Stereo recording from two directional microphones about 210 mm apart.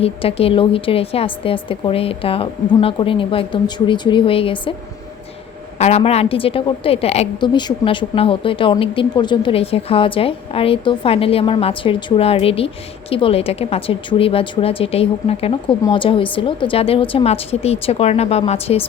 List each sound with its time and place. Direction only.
0.0 s a woman's voice: 25° left (ahead or behind)
5.8 s a woman's voice: 30° left (ahead or behind)